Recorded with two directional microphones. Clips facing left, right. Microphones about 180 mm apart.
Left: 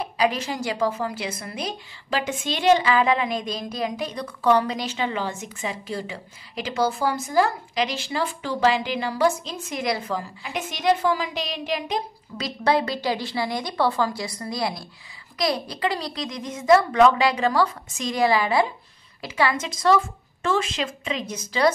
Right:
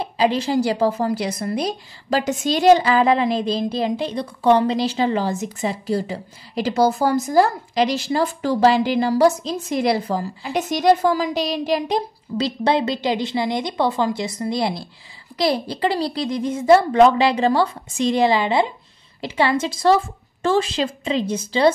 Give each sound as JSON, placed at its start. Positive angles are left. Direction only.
{"t": 0.0, "sound": "a woman's voice", "side_deg": -30}